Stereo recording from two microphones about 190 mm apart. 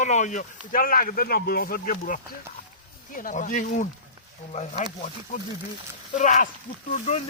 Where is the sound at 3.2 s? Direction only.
45° left (ahead or behind).